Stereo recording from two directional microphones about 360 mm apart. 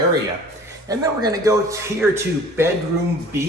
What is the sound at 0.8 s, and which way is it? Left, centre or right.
A man's voice, centre.